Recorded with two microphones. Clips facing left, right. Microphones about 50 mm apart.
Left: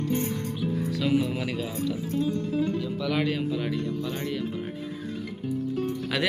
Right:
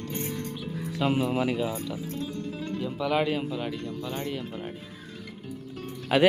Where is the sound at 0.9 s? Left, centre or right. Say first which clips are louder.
Right 2 dB; right.